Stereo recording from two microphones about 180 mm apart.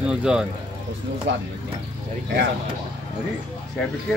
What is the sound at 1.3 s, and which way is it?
Speech, 90° right.